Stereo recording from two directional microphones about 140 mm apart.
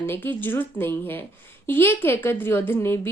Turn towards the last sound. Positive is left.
turn(degrees=20)  # may be behind; listen again after turning